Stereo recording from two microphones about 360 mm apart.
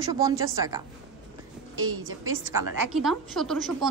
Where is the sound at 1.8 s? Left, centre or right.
Right.